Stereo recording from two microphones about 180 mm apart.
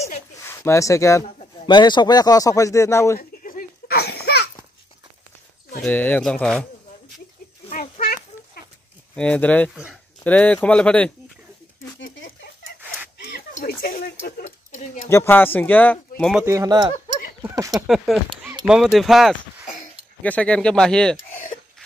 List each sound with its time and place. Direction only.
0.4 s speech: 15° left (ahead or behind)
3.2 s a sound: 55° left (ahead or behind)
5.8 s speech: 10° left (ahead or behind)
7.7 s a sound: 50° left (ahead or behind)
9.1 s speech: 5° left (ahead or behind)
13.2 s a sound: 60° left (ahead or behind)
15.0 s speech: 15° left (ahead or behind)
16.4 s speech: 20° right (ahead or behind)
17.8 s speech: centre (ahead or behind)